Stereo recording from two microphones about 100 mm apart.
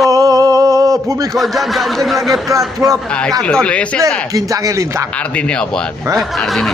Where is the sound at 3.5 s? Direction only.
10° left (ahead or behind).